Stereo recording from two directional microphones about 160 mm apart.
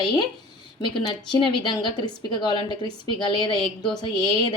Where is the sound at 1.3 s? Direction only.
25° left (ahead or behind).